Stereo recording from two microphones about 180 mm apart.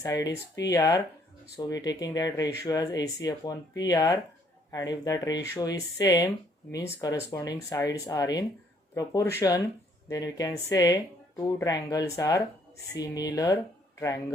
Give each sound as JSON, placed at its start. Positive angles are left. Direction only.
{"t": 0.0, "sound": "speech", "side_deg": 20}